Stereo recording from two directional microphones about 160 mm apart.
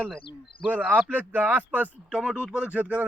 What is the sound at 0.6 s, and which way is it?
A man's voice, 10° right (ahead or behind).